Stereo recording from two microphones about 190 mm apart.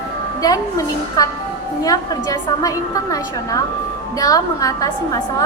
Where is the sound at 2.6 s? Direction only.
20° left (ahead or behind).